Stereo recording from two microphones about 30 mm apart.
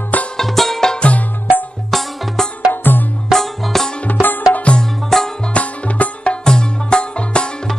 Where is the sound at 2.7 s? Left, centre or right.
Left.